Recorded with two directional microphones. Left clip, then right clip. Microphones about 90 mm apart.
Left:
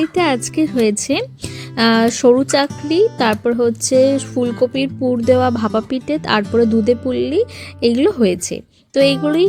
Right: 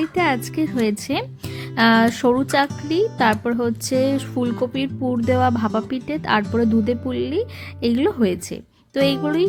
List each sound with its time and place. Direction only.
0.0 s speech: 45° left (ahead or behind)